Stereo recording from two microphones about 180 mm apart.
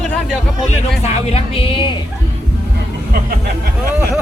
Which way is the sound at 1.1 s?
30° left (ahead or behind).